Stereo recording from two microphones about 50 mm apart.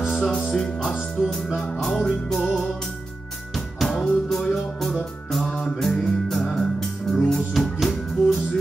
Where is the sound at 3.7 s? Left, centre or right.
Centre.